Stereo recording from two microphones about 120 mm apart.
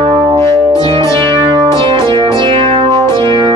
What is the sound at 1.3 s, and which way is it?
Music, 40° right (ahead or behind).